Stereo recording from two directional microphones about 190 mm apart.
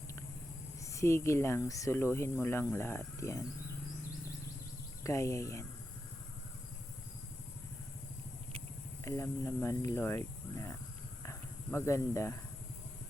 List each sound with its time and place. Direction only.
0.9 s speech: 15° left (ahead or behind)
5.0 s speech: 15° left (ahead or behind)
9.0 s speech: 15° left (ahead or behind)
11.2 s a sound: 15° left (ahead or behind)